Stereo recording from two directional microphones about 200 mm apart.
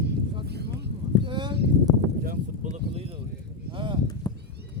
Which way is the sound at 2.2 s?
45° right (ahead or behind).